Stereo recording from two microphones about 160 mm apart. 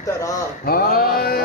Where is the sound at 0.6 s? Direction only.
70° left (ahead or behind).